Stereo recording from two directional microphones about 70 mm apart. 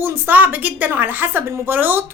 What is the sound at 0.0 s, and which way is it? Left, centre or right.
A woman's voice, right.